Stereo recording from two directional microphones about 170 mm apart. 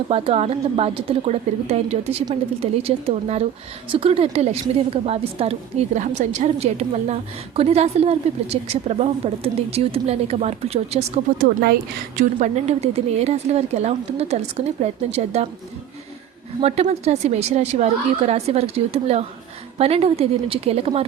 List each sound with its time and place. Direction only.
0.1 s a woman's voice: 35° right (ahead or behind)
11.6 s a woman's voice: 55° right (ahead or behind); by 15.4 s 40° right (ahead or behind)
16.6 s a woman's voice: 40° right (ahead or behind)